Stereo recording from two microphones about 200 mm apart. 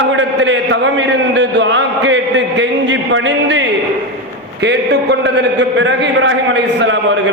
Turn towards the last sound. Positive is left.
turn(degrees=-65)  # may be behind; listen again after turning